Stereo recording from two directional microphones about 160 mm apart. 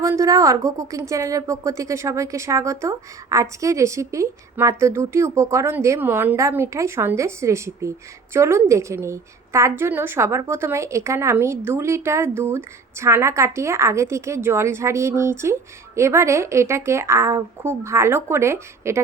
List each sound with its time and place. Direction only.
0.0 s a woman's voice: 20° right (ahead or behind)